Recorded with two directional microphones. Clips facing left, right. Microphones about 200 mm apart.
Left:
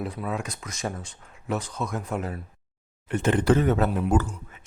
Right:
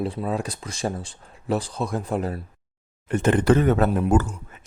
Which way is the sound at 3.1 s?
50° right (ahead or behind).